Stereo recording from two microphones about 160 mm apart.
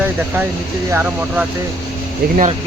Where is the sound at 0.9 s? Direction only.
10° right (ahead or behind).